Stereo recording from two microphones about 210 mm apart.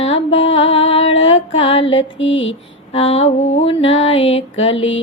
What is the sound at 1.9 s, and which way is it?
Mantra, 65° left (ahead or behind).